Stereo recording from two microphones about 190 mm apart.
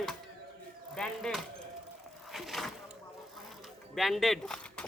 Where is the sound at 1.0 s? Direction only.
5° left (ahead or behind).